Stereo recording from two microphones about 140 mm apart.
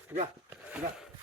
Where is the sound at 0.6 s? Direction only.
10° right (ahead or behind).